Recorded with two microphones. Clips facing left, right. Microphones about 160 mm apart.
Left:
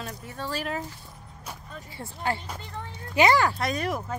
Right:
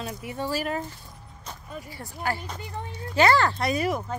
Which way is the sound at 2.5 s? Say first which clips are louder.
Right 2 dB; 15° right (ahead or behind).